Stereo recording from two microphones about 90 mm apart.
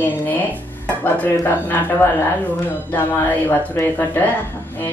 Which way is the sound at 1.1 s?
20° left (ahead or behind).